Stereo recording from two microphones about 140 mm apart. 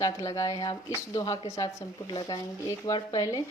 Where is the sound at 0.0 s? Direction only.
25° left (ahead or behind).